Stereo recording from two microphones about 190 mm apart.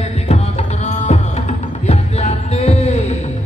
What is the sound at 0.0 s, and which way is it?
Music, 35° left (ahead or behind).